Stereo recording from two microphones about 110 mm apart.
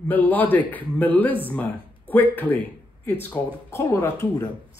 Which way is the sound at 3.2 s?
20° left (ahead or behind).